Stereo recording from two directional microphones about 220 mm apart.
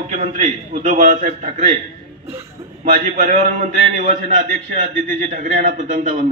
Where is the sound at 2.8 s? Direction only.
35° right (ahead or behind).